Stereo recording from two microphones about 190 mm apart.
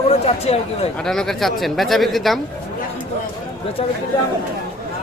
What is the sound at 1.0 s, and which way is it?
Speech, centre (ahead or behind).